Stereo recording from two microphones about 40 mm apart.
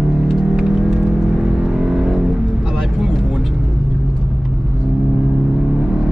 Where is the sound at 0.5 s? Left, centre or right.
Right.